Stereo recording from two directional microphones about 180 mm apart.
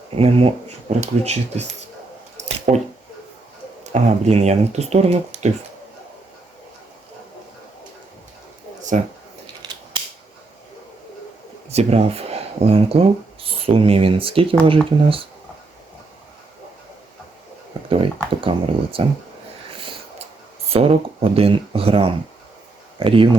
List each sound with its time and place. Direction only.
0.2 s speech: 35° right (ahead or behind)
2.4 s a sound: 40° right (ahead or behind)
3.9 s speech: 35° right (ahead or behind)
9.0 s speech: 40° right (ahead or behind)
11.7 s speech: 35° right (ahead or behind)
18.3 s computer keyboard: 30° right (ahead or behind)
20.7 s speech: 30° right (ahead or behind)